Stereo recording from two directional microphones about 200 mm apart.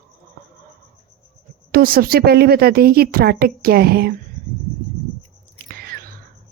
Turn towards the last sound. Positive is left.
turn(degrees=-50)  # may be behind; listen again after turning